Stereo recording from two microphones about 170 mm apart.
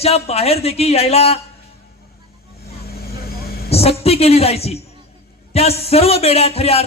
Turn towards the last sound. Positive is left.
turn(degrees=35)  # may be behind; listen again after turning